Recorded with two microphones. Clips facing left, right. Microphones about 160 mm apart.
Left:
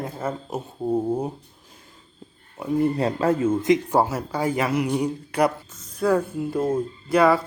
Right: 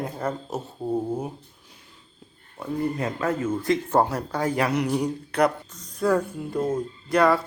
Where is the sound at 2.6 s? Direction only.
20° left (ahead or behind).